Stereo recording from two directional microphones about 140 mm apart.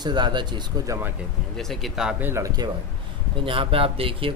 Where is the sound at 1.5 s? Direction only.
Centre (ahead or behind); by 2.7 s 25° right (ahead or behind).